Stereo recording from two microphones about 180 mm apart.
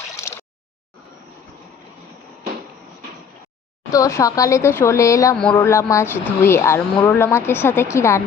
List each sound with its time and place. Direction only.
3.9 s speech: 20° left (ahead or behind)